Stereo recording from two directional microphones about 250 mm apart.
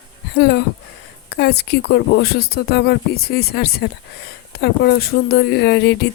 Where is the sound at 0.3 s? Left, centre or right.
Left.